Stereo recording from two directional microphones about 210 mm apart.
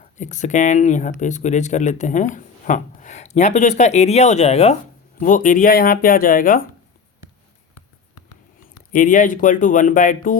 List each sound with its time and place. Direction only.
0.2 s speech: 35° left (ahead or behind)
8.9 s speech: 40° left (ahead or behind)